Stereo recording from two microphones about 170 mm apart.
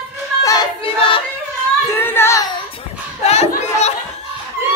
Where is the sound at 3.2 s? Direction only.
40° left (ahead or behind).